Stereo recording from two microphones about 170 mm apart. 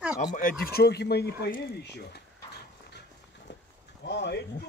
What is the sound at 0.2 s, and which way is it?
Speech, 55° left (ahead or behind).